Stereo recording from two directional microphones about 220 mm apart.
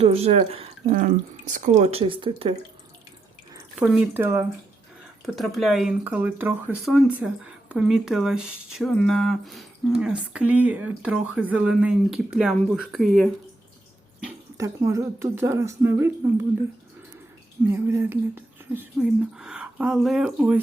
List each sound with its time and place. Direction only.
0.0 s speech: 25° right (ahead or behind)
3.8 s speech: centre (ahead or behind)
5.2 s speech: centre (ahead or behind)
14.6 s speech: 15° right (ahead or behind)
17.7 s speech: 10° right (ahead or behind)